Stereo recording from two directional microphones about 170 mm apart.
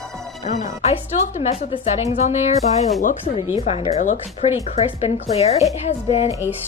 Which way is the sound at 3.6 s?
35° left (ahead or behind).